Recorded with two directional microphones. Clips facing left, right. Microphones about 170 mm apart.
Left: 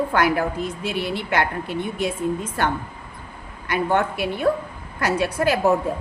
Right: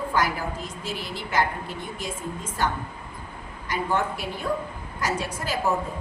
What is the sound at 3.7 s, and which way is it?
A woman's voice, 65° left (ahead or behind).